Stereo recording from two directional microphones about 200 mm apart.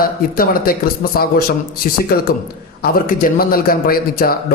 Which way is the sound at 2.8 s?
45° left (ahead or behind).